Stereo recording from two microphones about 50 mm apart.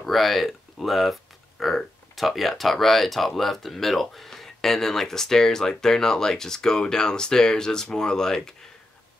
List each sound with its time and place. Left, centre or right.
0.0 s speech: centre